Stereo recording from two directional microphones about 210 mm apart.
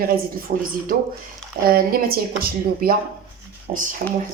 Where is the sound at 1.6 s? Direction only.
45° right (ahead or behind).